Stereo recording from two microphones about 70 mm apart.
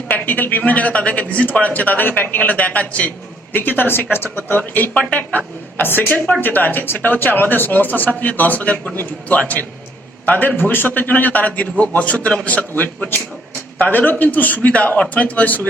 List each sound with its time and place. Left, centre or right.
0.1 s a man's voice: left